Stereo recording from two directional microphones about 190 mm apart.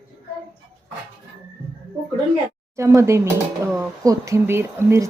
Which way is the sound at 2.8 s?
15° right (ahead or behind).